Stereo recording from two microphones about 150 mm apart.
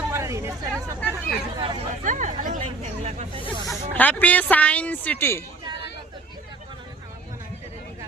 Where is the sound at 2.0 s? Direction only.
55° right (ahead or behind).